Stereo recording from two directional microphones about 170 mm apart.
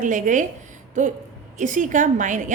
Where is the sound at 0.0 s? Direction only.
50° right (ahead or behind).